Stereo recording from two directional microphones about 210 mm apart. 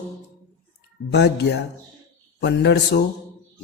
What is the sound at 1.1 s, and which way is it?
A man's voice, 55° left (ahead or behind).